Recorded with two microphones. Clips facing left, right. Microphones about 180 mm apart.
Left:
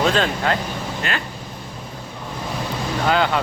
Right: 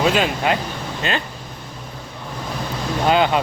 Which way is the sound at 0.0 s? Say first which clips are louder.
Right 1 dB; 10° right (ahead or behind).